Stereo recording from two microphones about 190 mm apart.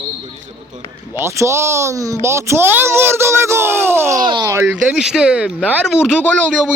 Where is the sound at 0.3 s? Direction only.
40° right (ahead or behind).